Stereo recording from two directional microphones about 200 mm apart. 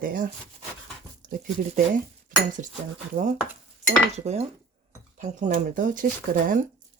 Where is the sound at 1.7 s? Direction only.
40° right (ahead or behind).